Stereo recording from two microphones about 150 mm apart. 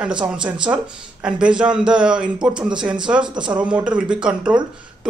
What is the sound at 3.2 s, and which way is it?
Speech, 30° right (ahead or behind).